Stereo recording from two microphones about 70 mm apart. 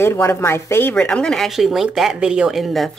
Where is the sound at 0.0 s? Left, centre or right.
Left.